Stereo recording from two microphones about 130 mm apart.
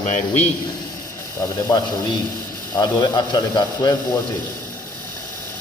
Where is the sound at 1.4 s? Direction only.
30° left (ahead or behind).